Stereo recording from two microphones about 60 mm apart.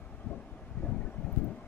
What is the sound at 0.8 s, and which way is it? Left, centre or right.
Vehicle, left.